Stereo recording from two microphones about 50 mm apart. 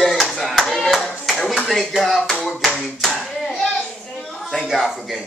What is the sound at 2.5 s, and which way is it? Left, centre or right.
Speech, centre.